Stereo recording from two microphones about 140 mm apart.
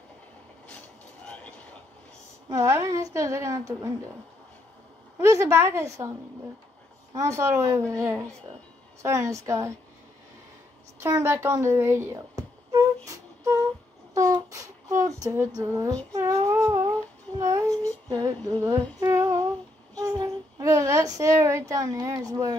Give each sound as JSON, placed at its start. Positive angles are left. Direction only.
{"t": 0.7, "sound": "train", "side_deg": 10}
{"t": 2.5, "sound": "a woman's voice", "side_deg": -20}
{"t": 5.2, "sound": "a woman's voice", "side_deg": -20}
{"t": 7.2, "sound": "a woman's voice", "side_deg": -20}
{"t": 11.0, "sound": "a sound", "side_deg": -20}
{"t": 15.2, "sound": "a woman's voice", "side_deg": -20}
{"t": 16.1, "sound": "a sound", "side_deg": -20}
{"t": 18.0, "sound": "female singing", "side_deg": -25}
{"t": 20.0, "sound": "child singing", "side_deg": -25}
{"t": 21.2, "sound": "a woman's voice", "side_deg": -20}